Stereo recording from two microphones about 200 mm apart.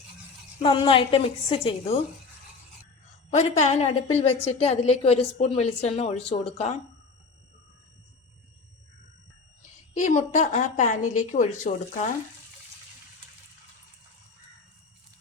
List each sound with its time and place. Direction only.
0.6 s a woman's voice: 25° left (ahead or behind)
3.2 s a woman's voice: 35° left (ahead or behind)
9.9 s a woman's voice: 40° left (ahead or behind)